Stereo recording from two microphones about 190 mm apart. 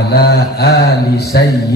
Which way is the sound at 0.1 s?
55° left (ahead or behind).